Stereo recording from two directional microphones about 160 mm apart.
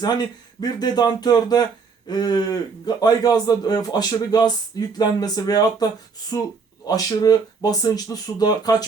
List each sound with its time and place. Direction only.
0.6 s a man's voice: 25° left (ahead or behind)